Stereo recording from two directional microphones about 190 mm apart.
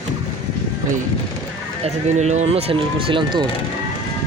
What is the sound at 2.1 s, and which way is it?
Speech, 35° right (ahead or behind).